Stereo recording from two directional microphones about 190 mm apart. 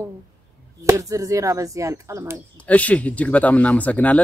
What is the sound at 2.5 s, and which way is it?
Speech, 5° left (ahead or behind).